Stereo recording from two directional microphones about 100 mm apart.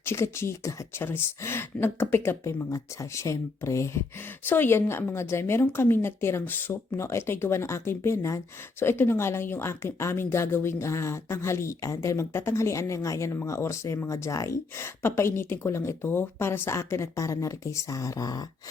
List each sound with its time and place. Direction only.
0.0 s speech: 25° left (ahead or behind)